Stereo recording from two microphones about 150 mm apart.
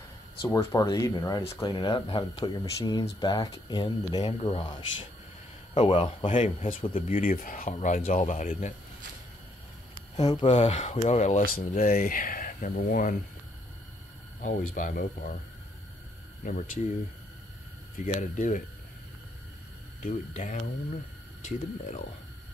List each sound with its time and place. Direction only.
0.4 s speech: 15° left (ahead or behind)
4.2 s speech: 40° left (ahead or behind)
4.5 s speech: 30° left (ahead or behind)
6.2 s speech: 55° left (ahead or behind)
6.8 s speech: 35° left (ahead or behind)
7.1 s speech: 65° left (ahead or behind)
10.1 s speech: 30° left (ahead or behind)
10.4 s speech: 45° left (ahead or behind)
11.4 s speech: 75° left (ahead or behind)
14.4 s speech: 60° left (ahead or behind)
16.4 s speech: 60° left (ahead or behind)
17.9 s speech: 60° left (ahead or behind)
20.0 s speech: 55° left (ahead or behind)